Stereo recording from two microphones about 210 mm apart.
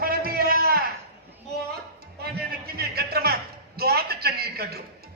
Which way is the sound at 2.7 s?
50° right (ahead or behind).